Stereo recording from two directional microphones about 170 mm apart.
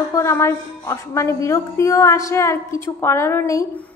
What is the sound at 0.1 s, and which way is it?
A woman's voice, 15° left (ahead or behind).